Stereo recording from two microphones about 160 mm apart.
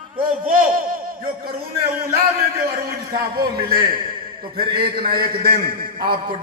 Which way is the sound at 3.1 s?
70° right (ahead or behind).